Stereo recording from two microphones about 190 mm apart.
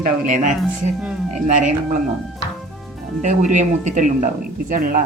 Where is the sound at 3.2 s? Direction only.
40° right (ahead or behind).